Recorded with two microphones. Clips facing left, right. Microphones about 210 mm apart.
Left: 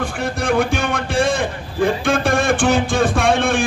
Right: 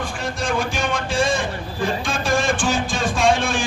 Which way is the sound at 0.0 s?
60° left (ahead or behind).